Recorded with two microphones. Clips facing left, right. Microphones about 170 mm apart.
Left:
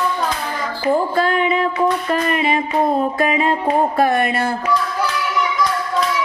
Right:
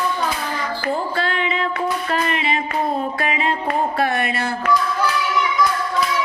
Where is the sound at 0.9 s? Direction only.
45° left (ahead or behind).